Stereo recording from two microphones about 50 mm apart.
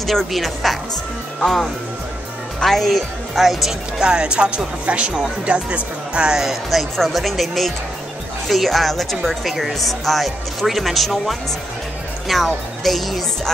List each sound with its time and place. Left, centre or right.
0.0 s speech: centre
4.0 s speech: centre
6.1 s speech: centre